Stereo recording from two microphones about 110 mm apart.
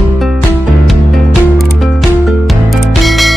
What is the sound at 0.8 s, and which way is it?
Music, centre (ahead or behind).